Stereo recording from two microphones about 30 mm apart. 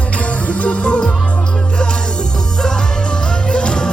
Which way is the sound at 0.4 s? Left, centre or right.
Left.